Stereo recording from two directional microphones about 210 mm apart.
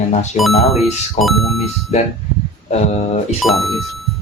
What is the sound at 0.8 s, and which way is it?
Speech, centre (ahead or behind).